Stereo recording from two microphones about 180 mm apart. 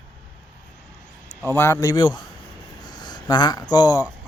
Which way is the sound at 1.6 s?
15° left (ahead or behind).